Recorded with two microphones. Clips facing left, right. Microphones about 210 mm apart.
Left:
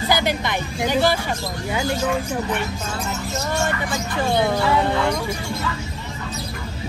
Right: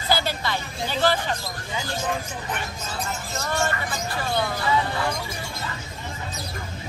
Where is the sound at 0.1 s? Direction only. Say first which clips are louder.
Left 2 dB; 15° left (ahead or behind).